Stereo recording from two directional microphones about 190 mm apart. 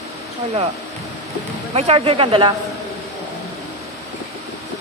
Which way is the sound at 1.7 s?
35° right (ahead or behind).